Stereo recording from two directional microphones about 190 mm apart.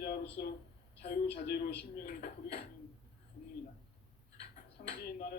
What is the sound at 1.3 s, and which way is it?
Speech, 50° left (ahead or behind).